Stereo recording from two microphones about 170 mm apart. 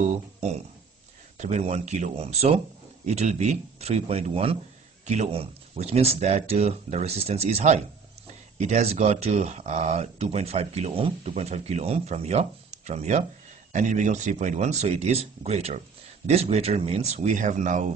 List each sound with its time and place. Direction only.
1.4 s speech: 40° right (ahead or behind)